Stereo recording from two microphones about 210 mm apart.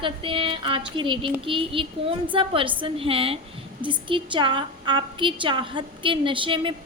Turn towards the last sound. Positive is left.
turn(degrees=-25)  # may be behind; listen again after turning